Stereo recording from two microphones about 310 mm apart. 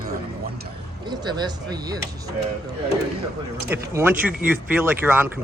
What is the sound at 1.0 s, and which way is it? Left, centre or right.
Speech, centre.